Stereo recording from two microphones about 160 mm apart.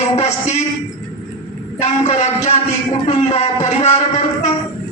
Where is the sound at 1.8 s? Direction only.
45° left (ahead or behind).